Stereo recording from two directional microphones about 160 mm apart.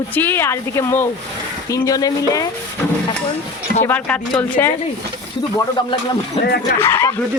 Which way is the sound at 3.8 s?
10° left (ahead or behind).